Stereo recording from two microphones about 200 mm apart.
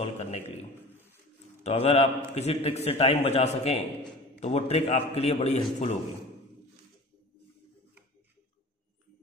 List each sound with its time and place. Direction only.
0.0 s a man's voice: 30° left (ahead or behind)
1.6 s a man's voice: 30° left (ahead or behind)